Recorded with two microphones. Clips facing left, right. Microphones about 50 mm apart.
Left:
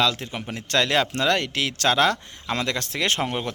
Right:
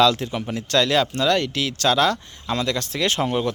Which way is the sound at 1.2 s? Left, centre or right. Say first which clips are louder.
Right 2 dB; left.